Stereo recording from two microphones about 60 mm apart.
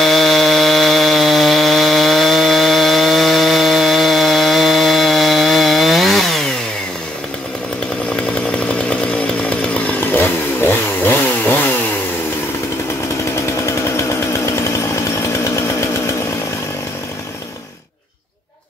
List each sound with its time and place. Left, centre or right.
0.0 s chainsaw: centre
8.5 s chainsaw: centre
9.9 s chainsaw: left
13.7 s chainsaw: left